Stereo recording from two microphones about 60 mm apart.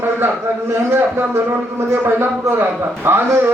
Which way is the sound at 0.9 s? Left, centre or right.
Right.